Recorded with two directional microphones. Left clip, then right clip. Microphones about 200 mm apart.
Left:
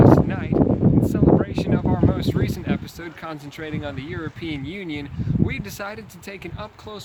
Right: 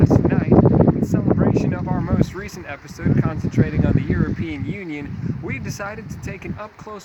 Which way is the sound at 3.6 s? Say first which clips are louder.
Right 10 dB; centre (ahead or behind).